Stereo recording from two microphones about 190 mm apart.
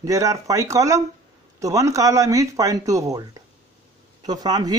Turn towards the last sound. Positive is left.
turn(degrees=-20)  # may be behind; listen again after turning